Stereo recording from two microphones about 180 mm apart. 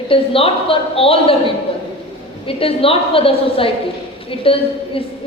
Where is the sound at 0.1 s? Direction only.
30° left (ahead or behind).